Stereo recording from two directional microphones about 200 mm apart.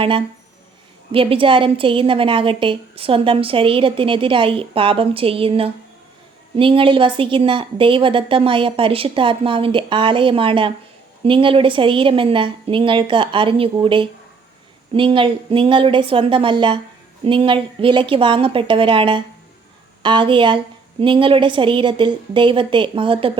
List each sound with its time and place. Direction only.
1.1 s a woman's voice: 25° right (ahead or behind)